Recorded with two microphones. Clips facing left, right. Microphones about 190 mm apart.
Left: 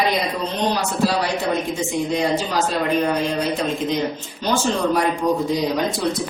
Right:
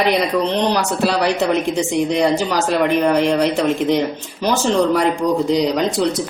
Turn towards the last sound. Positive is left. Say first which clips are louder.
# right 4 dB
turn(degrees=-75)  # may be behind; listen again after turning